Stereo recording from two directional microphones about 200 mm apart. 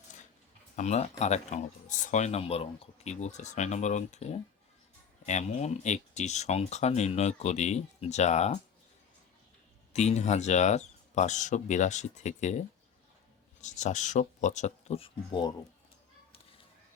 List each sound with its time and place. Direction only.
0.8 s speech: 35° left (ahead or behind)
9.9 s speech: 35° left (ahead or behind)